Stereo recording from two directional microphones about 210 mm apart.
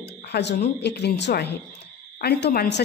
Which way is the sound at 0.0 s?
50° left (ahead or behind).